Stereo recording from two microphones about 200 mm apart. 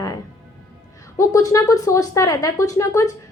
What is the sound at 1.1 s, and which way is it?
A woman's voice, 15° left (ahead or behind).